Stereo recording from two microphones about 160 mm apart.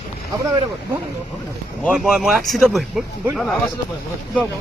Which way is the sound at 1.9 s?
5° right (ahead or behind).